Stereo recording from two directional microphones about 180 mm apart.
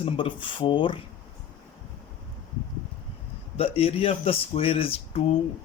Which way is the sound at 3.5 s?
35° left (ahead or behind).